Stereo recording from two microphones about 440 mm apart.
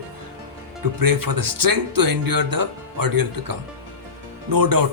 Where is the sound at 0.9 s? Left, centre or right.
Right.